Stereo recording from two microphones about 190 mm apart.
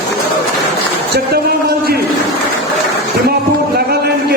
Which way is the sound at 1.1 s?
55° right (ahead or behind).